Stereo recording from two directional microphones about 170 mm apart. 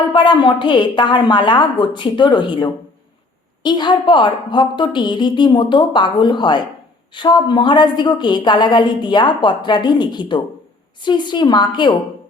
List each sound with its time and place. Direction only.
0.1 s a woman's voice: 25° left (ahead or behind)